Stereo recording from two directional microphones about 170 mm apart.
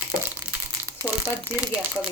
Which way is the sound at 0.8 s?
15° right (ahead or behind).